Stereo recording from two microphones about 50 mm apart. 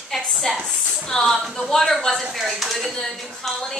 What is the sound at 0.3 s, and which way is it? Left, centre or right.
A woman's voice, centre.